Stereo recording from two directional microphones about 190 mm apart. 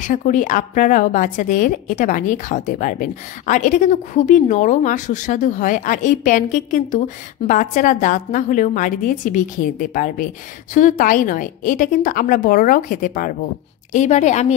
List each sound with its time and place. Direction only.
0.0 s a woman's voice: 40° left (ahead or behind)